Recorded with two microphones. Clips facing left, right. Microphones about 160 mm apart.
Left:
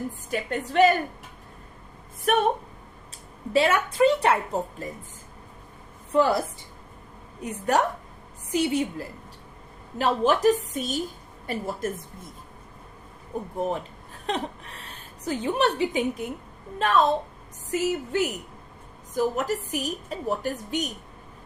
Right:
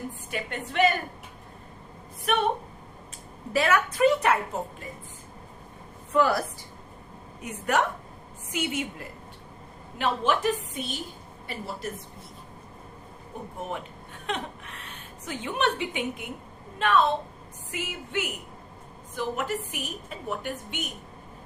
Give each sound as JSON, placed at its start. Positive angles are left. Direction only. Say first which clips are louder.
{"t": 0.3, "sound": "a woman's voice", "louder": "left 6 dB", "side_deg": 40}
{"t": 2.3, "sound": "a woman's voice", "louder": "left 4 dB", "side_deg": 45}
{"t": 3.5, "sound": "a woman's voice", "louder": "left 2 dB", "side_deg": 25}
{"t": 6.1, "sound": "a woman's voice", "louder": "left 2 dB", "side_deg": 30}
{"t": 7.4, "sound": "a woman's voice", "louder": "left 2 dB", "side_deg": 35}
{"t": 13.6, "sound": "a woman's voice", "louder": "left 7 dB", "side_deg": 35}